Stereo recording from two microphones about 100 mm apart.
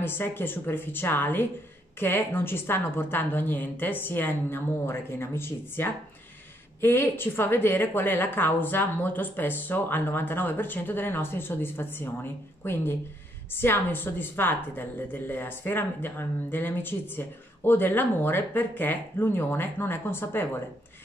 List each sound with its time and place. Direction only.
0.0 s a woman's voice: 20° left (ahead or behind)